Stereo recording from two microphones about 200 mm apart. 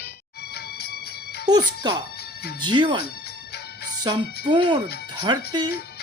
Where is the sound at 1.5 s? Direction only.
20° right (ahead or behind).